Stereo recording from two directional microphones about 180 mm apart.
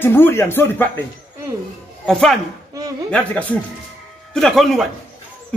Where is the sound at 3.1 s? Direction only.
5° left (ahead or behind).